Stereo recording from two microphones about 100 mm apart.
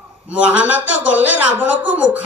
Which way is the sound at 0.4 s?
15° right (ahead or behind).